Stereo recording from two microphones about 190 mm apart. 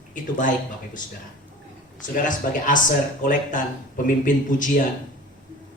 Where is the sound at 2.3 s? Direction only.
45° left (ahead or behind).